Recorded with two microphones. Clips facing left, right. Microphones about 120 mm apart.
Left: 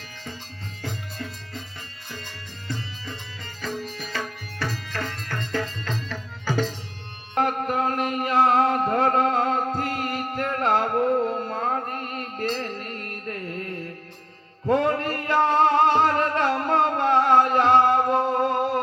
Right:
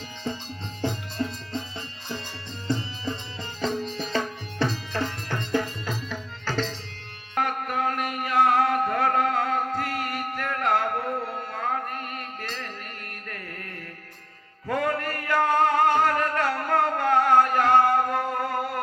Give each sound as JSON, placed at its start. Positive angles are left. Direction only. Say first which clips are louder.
{"t": 0.8, "sound": "music", "louder": "right 6 dB", "side_deg": -25}
{"t": 2.6, "sound": "music", "louder": "right 6 dB", "side_deg": -20}
{"t": 6.4, "sound": "tabla", "louder": "left 3 dB", "side_deg": 10}
{"t": 7.3, "sound": "music", "louder": "left 3 dB", "side_deg": 30}